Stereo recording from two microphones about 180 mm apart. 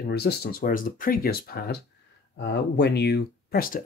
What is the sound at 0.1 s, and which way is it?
Speech, 60° left (ahead or behind).